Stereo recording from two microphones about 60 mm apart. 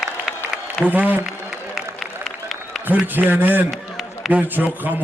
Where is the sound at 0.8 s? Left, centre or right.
Right.